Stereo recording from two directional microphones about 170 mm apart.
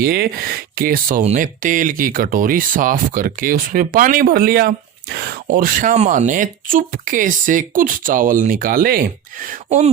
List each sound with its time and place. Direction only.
0.0 s speech: 65° right (ahead or behind)
1.2 s speech: 45° right (ahead or behind)